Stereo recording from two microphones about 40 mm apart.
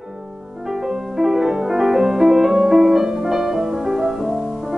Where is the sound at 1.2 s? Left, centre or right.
Centre.